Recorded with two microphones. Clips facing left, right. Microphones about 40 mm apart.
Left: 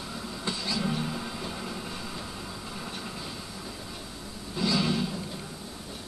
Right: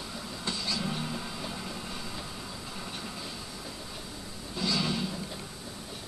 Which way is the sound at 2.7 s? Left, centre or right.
Centre.